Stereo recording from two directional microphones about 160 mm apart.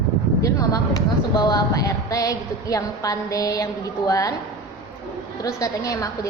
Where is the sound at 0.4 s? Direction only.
25° left (ahead or behind).